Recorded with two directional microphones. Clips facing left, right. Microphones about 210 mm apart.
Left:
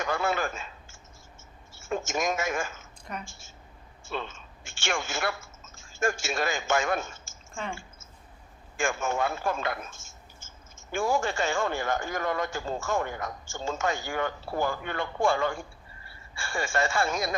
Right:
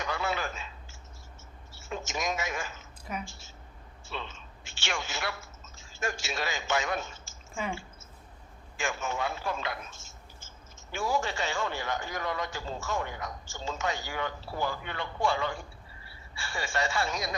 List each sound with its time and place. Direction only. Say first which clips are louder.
0.0 s a sound: left 4 dB; 50° left (ahead or behind)
1.7 s speech: left 6 dB; 50° left (ahead or behind)
3.0 s speech: right 1 dB; 5° right (ahead or behind)
3.2 s a man's voice: right 1 dB; 50° left (ahead or behind)
7.5 s speech: right 1 dB; 5° right (ahead or behind)
8.8 s speech: left 5 dB; 50° left (ahead or behind)